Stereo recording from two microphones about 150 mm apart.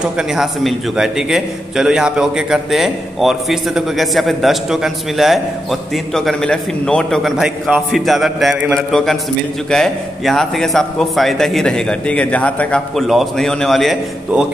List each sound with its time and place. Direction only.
0.0 s a man's voice: 5° right (ahead or behind)